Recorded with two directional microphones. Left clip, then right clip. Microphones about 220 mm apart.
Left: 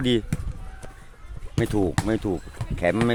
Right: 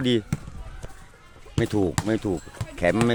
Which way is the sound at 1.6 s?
Centre (ahead or behind).